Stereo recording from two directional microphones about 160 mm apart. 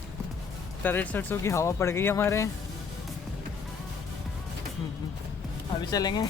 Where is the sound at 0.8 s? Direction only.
10° left (ahead or behind).